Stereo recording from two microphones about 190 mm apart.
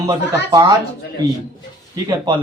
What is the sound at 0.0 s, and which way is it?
Speech, 20° right (ahead or behind).